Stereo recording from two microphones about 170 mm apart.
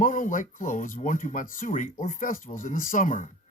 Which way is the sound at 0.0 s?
50° left (ahead or behind).